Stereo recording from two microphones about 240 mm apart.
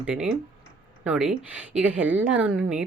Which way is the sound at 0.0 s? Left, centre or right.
Centre.